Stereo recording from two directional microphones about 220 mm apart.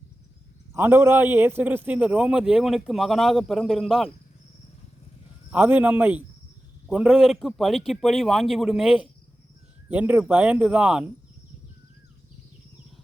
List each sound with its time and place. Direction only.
0.7 s a man's voice: 10° right (ahead or behind)
5.5 s a man's voice: 5° right (ahead or behind)